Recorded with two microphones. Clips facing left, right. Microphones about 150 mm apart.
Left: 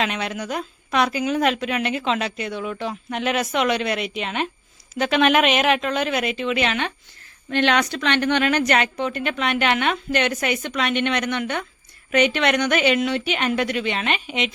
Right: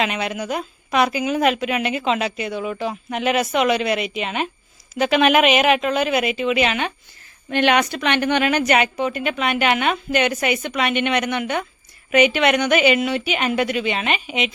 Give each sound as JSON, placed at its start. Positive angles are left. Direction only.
{"t": 0.0, "sound": "a woman's voice", "side_deg": -5}